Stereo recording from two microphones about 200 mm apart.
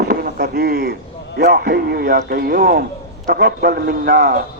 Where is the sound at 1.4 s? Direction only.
50° right (ahead or behind).